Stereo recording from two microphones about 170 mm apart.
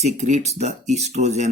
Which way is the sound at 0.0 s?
45° right (ahead or behind).